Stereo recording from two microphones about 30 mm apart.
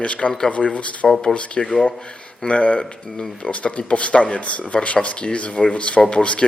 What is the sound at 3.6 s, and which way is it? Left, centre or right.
A man's voice, left.